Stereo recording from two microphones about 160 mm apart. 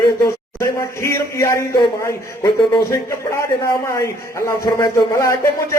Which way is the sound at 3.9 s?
20° left (ahead or behind).